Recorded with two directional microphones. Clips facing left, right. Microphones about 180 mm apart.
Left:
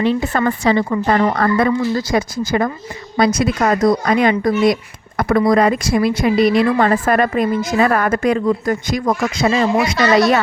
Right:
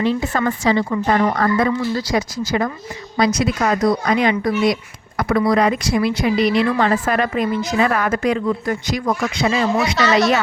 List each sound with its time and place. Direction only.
0.0 s speech: 60° left (ahead or behind); by 10.1 s 35° left (ahead or behind)
10.2 s speech: 50° left (ahead or behind)